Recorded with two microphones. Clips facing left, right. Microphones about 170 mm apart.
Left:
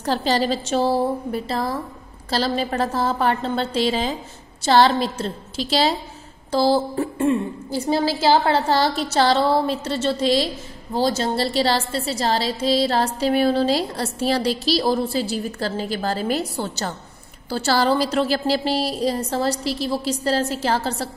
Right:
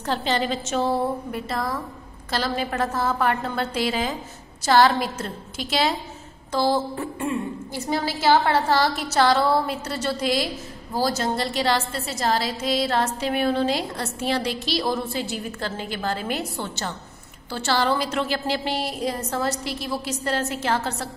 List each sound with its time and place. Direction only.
0.0 s a woman's voice: 35° left (ahead or behind)